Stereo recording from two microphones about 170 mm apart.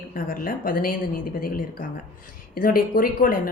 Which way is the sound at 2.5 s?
55° left (ahead or behind).